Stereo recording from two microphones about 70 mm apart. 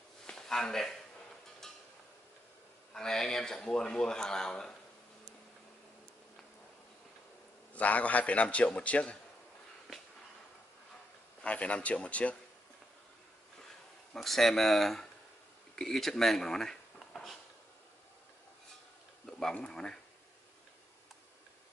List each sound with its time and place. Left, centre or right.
0.3 s a sound: centre
2.9 s speech: centre
7.7 s a man's voice: left
11.4 s speech: centre
14.1 s speech: centre
15.7 s a sound: centre
19.5 s speech: centre